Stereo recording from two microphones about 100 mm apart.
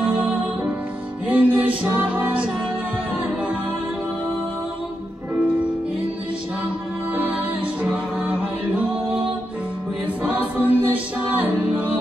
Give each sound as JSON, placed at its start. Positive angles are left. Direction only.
{"t": 0.0, "sound": "music", "side_deg": -15}
{"t": 5.3, "sound": "music", "side_deg": -15}
{"t": 7.2, "sound": "music", "side_deg": -15}
{"t": 10.2, "sound": "music", "side_deg": -15}